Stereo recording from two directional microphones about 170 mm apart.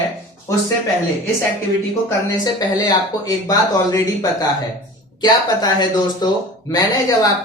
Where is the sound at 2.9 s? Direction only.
20° left (ahead or behind).